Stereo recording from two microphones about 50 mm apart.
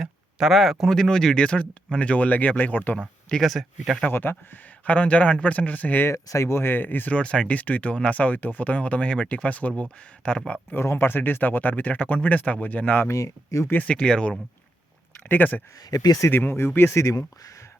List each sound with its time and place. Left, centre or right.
0.0 s speech: centre; by 3.0 s left
3.4 s speech: centre
4.1 s speech: left
4.9 s speech: left
6.1 s speech: left
7.1 s speech: left
10.9 s speech: left
13.1 s speech: left
13.8 s speech: centre
15.3 s speech: left